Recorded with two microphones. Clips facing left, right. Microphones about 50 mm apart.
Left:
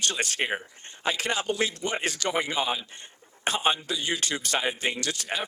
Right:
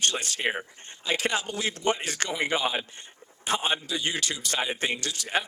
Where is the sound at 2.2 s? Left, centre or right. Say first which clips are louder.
Left 1 dB; right.